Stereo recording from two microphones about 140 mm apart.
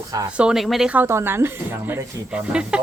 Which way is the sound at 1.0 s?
15° right (ahead or behind).